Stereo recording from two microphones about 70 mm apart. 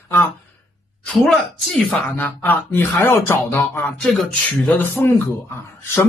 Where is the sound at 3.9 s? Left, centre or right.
Centre.